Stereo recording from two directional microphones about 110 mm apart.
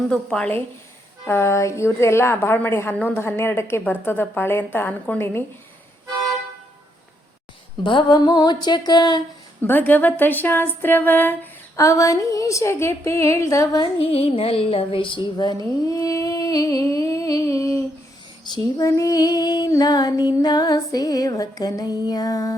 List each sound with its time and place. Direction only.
0.1 s a woman's voice: 10° left (ahead or behind)
1.3 s a woman's voice: 25° left (ahead or behind)
7.9 s a sound: 45° left (ahead or behind)
9.6 s a woman's voice: 15° left (ahead or behind)
11.8 s a woman's voice: 30° left (ahead or behind)
14.1 s music: 65° left (ahead or behind); by 15.5 s 40° left (ahead or behind)
15.9 s humming: 30° left (ahead or behind)
18.5 s female singing: 30° left (ahead or behind)